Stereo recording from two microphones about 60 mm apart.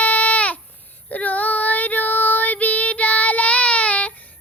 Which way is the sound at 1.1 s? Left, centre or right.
Left.